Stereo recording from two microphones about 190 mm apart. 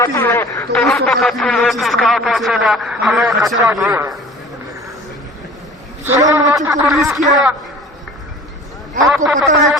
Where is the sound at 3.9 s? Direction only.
15° right (ahead or behind).